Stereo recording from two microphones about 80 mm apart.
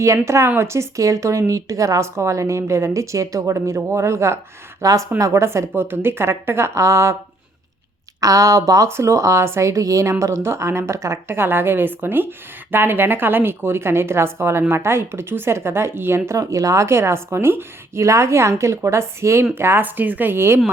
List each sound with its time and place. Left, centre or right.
0.0 s a woman's voice: right
8.2 s speech: right
8.9 s a woman's voice: right